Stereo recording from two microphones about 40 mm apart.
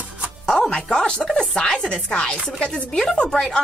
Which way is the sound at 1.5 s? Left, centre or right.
Left.